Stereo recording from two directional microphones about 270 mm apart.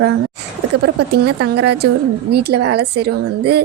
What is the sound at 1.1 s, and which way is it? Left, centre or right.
A woman's voice, right.